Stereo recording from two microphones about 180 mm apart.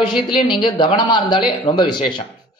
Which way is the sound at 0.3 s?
25° left (ahead or behind).